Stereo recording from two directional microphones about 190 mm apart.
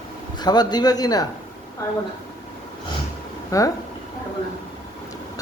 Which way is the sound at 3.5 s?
15° left (ahead or behind).